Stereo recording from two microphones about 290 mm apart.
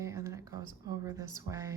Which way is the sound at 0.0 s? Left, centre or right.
Centre.